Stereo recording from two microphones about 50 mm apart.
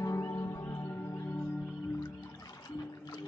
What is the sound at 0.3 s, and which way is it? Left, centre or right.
Music, left.